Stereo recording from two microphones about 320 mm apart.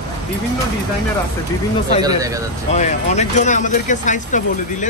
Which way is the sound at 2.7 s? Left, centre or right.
Left.